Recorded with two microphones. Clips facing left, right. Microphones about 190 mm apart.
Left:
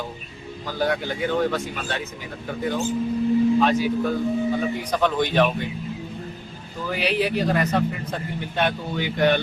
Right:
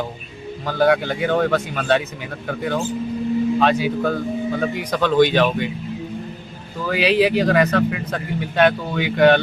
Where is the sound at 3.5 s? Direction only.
80° right.